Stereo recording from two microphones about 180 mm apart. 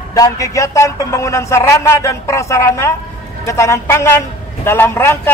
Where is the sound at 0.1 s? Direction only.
20° left (ahead or behind).